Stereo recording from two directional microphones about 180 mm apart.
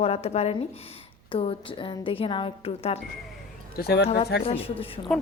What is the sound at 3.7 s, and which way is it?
Speech, 60° left (ahead or behind).